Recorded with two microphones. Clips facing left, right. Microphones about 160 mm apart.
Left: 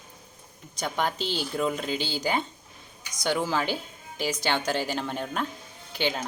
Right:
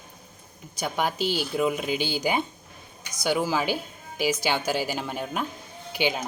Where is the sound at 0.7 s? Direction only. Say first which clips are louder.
Right 2 dB; 10° right (ahead or behind).